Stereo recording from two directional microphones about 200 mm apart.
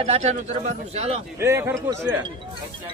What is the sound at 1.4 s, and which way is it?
Speech, 15° right (ahead or behind).